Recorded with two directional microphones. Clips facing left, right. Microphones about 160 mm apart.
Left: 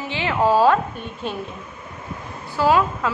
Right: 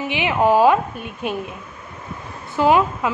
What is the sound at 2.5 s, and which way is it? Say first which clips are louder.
Speech: right 2 dB; 20° right (ahead or behind).